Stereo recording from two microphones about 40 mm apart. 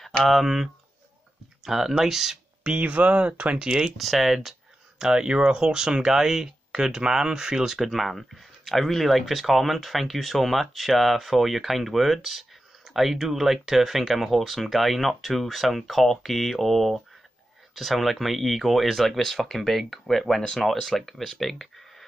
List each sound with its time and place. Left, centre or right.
0.0 s speech: centre
2.8 s speech: right
4.0 s speech: centre